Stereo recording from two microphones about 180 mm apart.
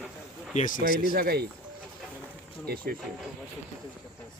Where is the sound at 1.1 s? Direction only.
60° right (ahead or behind).